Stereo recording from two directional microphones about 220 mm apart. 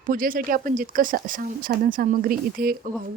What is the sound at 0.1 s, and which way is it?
Speech, 40° right (ahead or behind).